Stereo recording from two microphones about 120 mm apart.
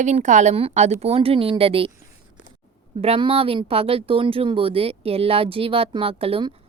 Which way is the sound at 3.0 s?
50° right (ahead or behind).